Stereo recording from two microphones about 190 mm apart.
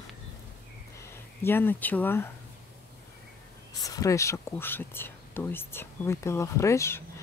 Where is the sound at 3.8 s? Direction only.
15° left (ahead or behind).